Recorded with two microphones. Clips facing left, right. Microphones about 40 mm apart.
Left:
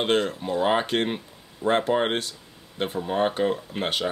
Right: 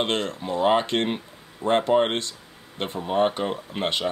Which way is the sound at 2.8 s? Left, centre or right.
Centre.